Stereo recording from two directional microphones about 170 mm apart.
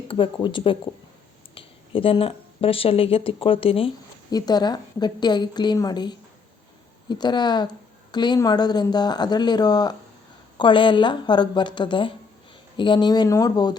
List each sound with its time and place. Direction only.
0.1 s speech: 30° left (ahead or behind)